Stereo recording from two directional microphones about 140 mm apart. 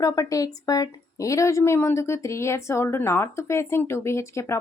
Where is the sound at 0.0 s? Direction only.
25° left (ahead or behind).